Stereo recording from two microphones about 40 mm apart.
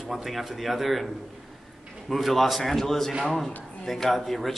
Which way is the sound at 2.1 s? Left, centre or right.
Centre.